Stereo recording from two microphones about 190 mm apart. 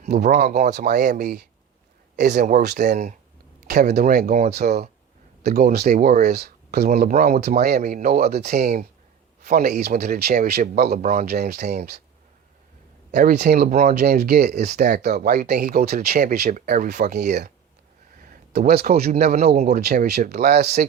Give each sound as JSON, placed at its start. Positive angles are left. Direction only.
{"t": 0.2, "sound": "speech", "side_deg": -40}
{"t": 3.9, "sound": "speech", "side_deg": -55}
{"t": 4.5, "sound": "speech", "side_deg": -55}
{"t": 7.0, "sound": "speech", "side_deg": -45}
{"t": 7.6, "sound": "speech", "side_deg": -55}
{"t": 9.4, "sound": "a man's voice", "side_deg": -40}
{"t": 9.6, "sound": "speech", "side_deg": -55}
{"t": 11.3, "sound": "speech", "side_deg": -55}
{"t": 13.1, "sound": "a sound", "side_deg": -45}
{"t": 13.3, "sound": "speech", "side_deg": -55}
{"t": 17.2, "sound": "speech", "side_deg": -60}
{"t": 19.5, "sound": "speech", "side_deg": -35}
{"t": 19.7, "sound": "speech", "side_deg": -55}